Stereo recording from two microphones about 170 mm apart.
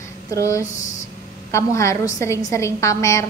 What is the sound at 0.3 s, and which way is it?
A woman's voice, 15° left (ahead or behind).